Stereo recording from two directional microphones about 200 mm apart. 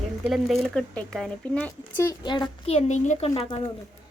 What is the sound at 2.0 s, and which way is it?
A woman's voice, 20° left (ahead or behind).